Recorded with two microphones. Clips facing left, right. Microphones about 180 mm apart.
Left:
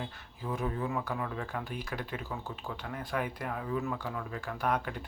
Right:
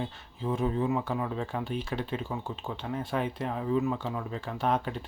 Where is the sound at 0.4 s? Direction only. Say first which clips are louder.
Right 6 dB; 25° right (ahead or behind).